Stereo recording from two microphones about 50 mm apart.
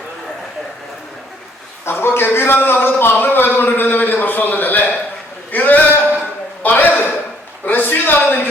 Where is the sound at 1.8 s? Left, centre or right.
Left.